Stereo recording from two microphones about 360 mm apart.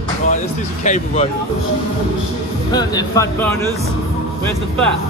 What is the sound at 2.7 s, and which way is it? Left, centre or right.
Speech, centre.